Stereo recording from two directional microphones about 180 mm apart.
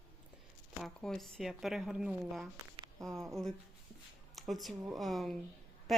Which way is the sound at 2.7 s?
25° right (ahead or behind).